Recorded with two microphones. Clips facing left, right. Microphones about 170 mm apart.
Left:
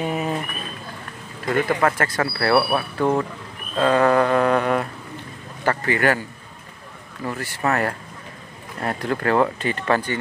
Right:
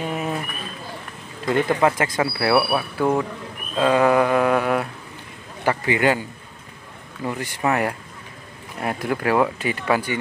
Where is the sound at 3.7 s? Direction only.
10° right (ahead or behind).